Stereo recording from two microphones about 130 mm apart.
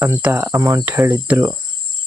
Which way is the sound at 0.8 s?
20° right (ahead or behind).